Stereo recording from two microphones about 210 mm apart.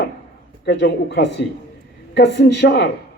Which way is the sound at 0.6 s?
55° left (ahead or behind).